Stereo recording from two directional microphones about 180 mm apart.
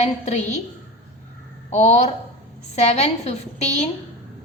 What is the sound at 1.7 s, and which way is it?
A woman's voice, 40° left (ahead or behind).